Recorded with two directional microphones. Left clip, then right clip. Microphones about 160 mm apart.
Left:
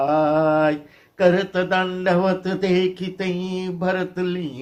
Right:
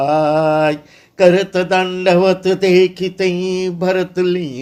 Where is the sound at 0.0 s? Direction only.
35° right (ahead or behind).